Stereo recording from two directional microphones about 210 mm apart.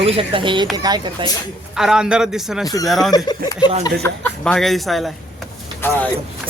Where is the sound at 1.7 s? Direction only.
5° right (ahead or behind).